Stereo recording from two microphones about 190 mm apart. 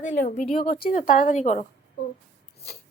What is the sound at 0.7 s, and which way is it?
Speech, 50° left (ahead or behind).